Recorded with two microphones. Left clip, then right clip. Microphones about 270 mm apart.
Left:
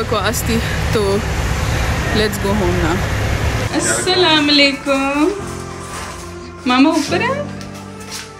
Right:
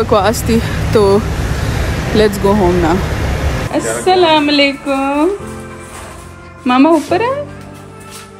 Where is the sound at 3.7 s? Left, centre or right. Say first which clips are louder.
Right 4 dB; centre.